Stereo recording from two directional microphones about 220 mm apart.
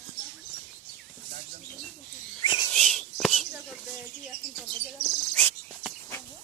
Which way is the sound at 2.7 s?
5° left (ahead or behind).